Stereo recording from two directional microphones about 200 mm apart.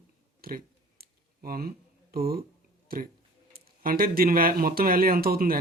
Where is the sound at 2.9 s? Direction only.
50° right (ahead or behind).